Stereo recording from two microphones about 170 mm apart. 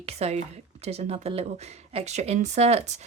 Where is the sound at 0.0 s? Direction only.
40° right (ahead or behind).